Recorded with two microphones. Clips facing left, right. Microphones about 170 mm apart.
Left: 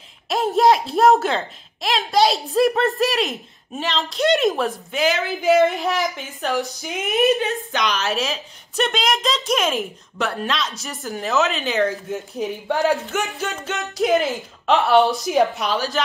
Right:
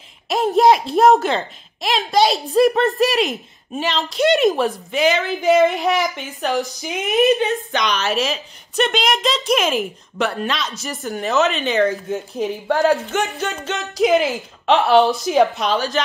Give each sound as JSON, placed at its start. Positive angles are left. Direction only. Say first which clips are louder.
{"t": 0.3, "sound": "a woman's voice", "louder": "right 2 dB", "side_deg": 0}
{"t": 5.5, "sound": "speech", "louder": "right 1 dB", "side_deg": -20}
{"t": 5.9, "sound": "a woman's voice", "louder": "right 2 dB", "side_deg": 0}